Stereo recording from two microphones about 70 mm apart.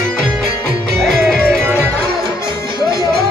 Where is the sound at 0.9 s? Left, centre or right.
Centre.